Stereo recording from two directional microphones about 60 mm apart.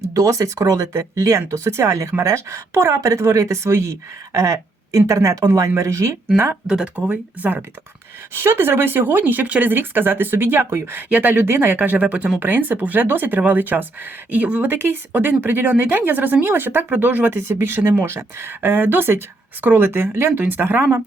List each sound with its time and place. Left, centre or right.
0.1 s speech: right
3.0 s speech: right
6.3 s speech: right
6.7 s speech: centre
7.1 s speech: right
8.3 s speech: right
11.1 s speech: right
17.3 s speech: right